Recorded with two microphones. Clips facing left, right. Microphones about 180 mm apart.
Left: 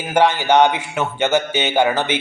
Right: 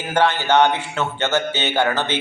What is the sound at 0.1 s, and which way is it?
Speech, 15° left (ahead or behind).